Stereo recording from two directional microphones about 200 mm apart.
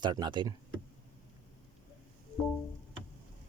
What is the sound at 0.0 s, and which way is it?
Speech, 20° right (ahead or behind).